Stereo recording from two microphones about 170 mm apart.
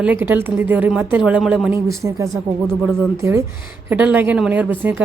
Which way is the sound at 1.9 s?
20° right (ahead or behind).